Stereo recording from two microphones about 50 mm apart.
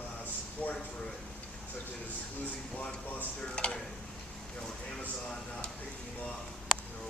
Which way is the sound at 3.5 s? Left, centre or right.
Centre.